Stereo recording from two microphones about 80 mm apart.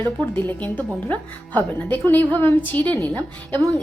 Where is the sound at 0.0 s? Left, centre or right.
Left.